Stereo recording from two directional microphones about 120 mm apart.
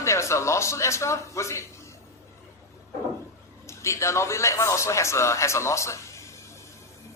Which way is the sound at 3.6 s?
25° left (ahead or behind).